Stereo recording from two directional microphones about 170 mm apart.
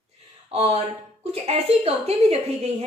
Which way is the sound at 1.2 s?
40° right (ahead or behind).